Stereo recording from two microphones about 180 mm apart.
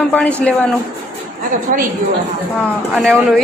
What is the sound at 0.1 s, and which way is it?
Speech, 5° left (ahead or behind).